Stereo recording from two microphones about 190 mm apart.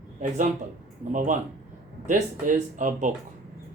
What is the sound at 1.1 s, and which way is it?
Speech, 45° right (ahead or behind).